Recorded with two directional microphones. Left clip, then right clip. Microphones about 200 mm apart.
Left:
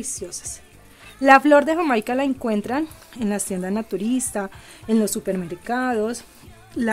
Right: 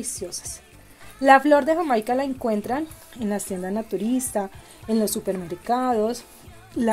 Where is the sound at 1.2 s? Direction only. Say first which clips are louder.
Left 2 dB; 15° left (ahead or behind).